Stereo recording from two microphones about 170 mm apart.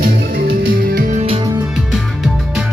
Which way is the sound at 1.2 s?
35° right (ahead or behind).